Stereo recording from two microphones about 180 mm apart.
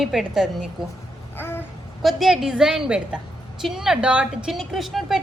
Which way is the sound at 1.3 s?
10° left (ahead or behind).